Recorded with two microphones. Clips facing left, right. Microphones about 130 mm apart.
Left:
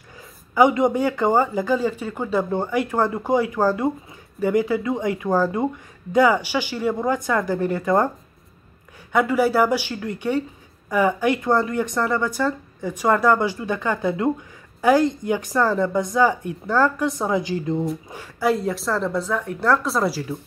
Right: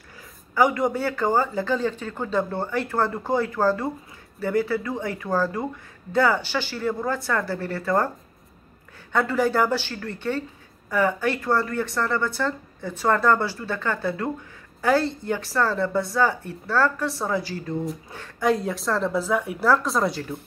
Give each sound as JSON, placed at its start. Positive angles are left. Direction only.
{"t": 0.6, "sound": "speech", "side_deg": 20}
{"t": 9.1, "sound": "speech", "side_deg": 10}
{"t": 18.1, "sound": "a woman's voice", "side_deg": 5}